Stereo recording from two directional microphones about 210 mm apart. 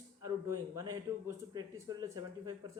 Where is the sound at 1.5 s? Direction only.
15° right (ahead or behind).